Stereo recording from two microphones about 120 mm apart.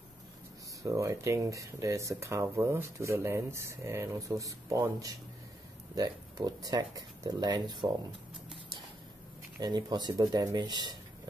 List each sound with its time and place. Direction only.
0.8 s speech: 25° right (ahead or behind)
9.6 s speech: 35° right (ahead or behind)